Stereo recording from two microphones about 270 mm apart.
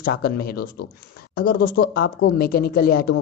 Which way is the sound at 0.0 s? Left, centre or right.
Left.